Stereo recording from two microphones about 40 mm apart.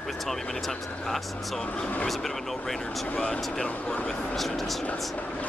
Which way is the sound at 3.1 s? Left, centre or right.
Left.